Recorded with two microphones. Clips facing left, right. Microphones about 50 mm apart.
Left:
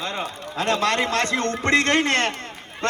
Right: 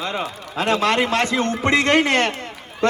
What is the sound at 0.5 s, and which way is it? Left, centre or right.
Speech, right.